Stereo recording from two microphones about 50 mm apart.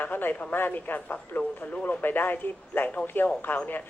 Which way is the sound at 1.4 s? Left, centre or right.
Left.